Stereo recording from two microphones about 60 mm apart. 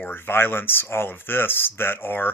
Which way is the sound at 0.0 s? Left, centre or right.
Left.